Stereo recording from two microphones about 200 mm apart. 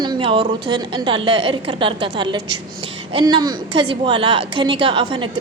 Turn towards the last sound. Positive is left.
turn(degrees=-25)  # may be behind; listen again after turning